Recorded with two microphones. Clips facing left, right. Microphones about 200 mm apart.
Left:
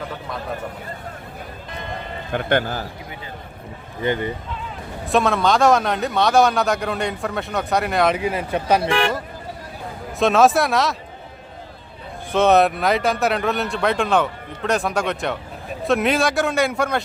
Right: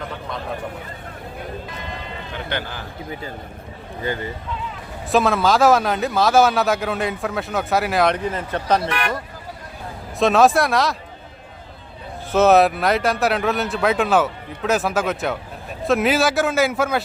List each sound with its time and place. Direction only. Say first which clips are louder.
2.3 s speech: left 9 dB; 50° left (ahead or behind)
4.0 s speech: left 4 dB; 20° left (ahead or behind)
5.0 s a man's voice: right 1 dB; centre (ahead or behind)
8.8 s speech: left 4 dB; 25° left (ahead or behind)
10.2 s a man's voice: even; centre (ahead or behind)
12.3 s a man's voice: right 1 dB; 5° right (ahead or behind)